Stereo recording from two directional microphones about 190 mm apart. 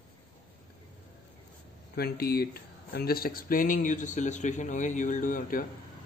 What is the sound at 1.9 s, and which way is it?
A man's voice, 55° left (ahead or behind).